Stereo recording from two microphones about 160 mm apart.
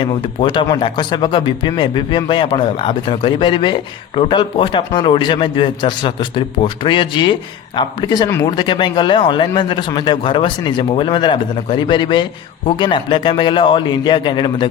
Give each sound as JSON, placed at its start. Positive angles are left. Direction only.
{"t": 0.0, "sound": "speech", "side_deg": 30}